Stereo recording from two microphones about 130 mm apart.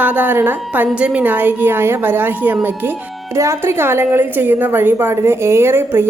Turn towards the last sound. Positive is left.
turn(degrees=-15)  # may be behind; listen again after turning